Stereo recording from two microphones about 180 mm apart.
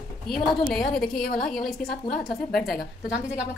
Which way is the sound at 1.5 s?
Centre (ahead or behind).